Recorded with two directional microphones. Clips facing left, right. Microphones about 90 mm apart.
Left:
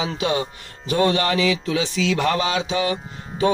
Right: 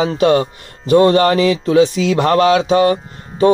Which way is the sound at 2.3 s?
55° right (ahead or behind).